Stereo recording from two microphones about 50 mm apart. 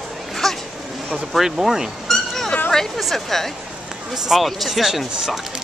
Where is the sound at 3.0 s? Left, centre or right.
Centre.